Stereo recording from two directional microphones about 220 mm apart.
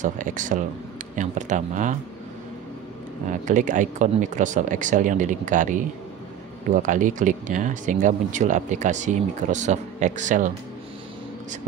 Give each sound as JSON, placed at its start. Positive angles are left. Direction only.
{"t": 0.0, "sound": "speech", "side_deg": -35}
{"t": 3.3, "sound": "speech", "side_deg": -35}